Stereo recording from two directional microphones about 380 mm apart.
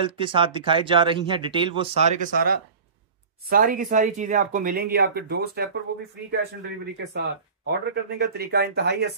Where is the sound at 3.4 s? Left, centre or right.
Right.